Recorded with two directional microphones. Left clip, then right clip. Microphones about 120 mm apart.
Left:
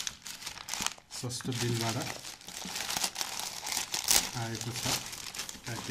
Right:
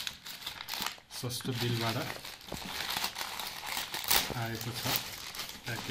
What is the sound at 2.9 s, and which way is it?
Crumpling, 40° left (ahead or behind).